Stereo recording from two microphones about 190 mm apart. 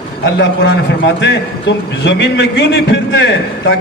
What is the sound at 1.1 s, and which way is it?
A man's voice, 70° left (ahead or behind).